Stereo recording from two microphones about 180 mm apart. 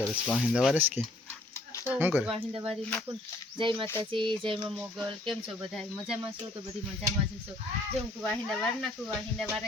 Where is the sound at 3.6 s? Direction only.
25° right (ahead or behind).